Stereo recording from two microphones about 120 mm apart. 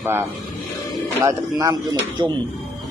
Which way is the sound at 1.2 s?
30° right (ahead or behind).